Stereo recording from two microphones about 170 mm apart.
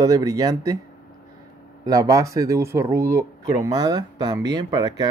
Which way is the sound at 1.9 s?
20° right (ahead or behind).